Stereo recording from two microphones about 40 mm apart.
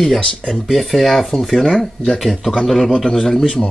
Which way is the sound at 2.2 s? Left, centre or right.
Centre.